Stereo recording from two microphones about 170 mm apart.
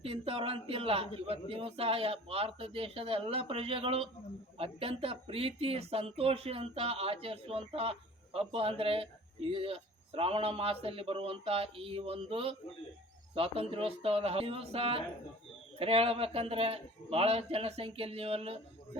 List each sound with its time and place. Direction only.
0.0 s speech: 35° right (ahead or behind)